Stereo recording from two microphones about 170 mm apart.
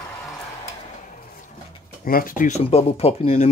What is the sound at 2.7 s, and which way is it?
Speech, 35° left (ahead or behind).